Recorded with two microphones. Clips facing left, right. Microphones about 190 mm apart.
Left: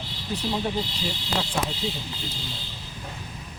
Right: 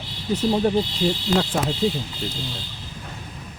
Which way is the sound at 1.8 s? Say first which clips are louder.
Right 9 dB; 35° right (ahead or behind).